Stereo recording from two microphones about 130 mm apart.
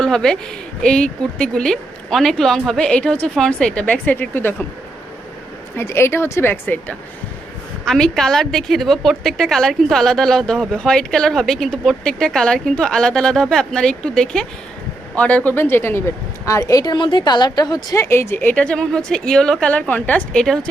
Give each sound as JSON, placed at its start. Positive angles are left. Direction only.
{"t": 0.0, "sound": "a woman's voice", "side_deg": 5}
{"t": 5.7, "sound": "speech", "side_deg": 20}
{"t": 7.9, "sound": "a woman's voice", "side_deg": 5}